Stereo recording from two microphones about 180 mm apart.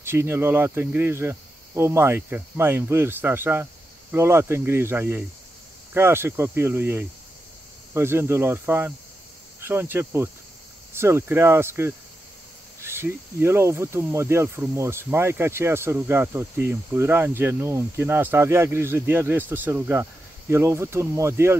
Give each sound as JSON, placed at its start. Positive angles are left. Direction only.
{"t": 0.0, "sound": "speech", "side_deg": -15}
{"t": 9.6, "sound": "cricket", "side_deg": -10}
{"t": 11.0, "sound": "speech", "side_deg": -15}